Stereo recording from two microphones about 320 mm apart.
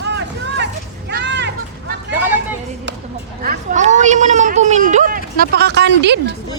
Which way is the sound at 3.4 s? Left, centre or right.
Right.